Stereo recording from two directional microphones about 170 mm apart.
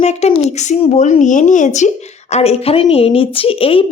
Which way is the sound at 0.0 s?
40° left (ahead or behind).